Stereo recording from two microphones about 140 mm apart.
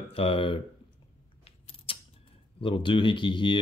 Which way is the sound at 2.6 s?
35° left (ahead or behind).